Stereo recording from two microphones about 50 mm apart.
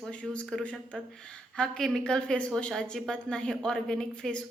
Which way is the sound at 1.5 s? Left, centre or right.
Centre.